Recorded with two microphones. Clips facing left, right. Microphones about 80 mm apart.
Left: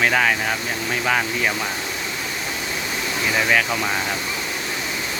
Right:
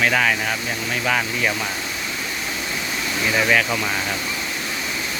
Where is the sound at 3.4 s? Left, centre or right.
Centre.